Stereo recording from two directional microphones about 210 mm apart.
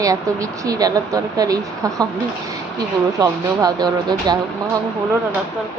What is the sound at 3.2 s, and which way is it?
Speech, 20° right (ahead or behind).